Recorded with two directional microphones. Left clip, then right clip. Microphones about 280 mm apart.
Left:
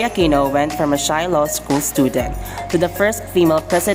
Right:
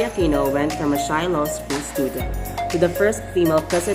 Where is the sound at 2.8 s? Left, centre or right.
Left.